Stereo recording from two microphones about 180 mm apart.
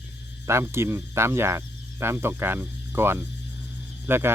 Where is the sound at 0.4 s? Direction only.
15° right (ahead or behind).